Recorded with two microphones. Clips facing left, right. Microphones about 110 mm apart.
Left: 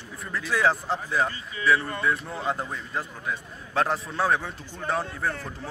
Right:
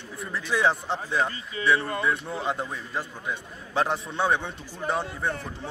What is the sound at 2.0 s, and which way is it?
A man's voice, centre (ahead or behind).